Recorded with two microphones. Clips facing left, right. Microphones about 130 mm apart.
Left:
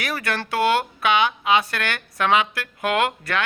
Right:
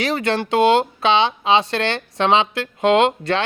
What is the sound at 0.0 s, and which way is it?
Speech, 25° right (ahead or behind).